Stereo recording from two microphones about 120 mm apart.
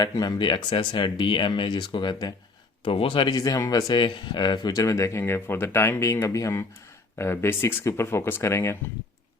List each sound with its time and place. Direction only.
0.0 s speech: 35° left (ahead or behind)
3.3 s speech: 30° left (ahead or behind)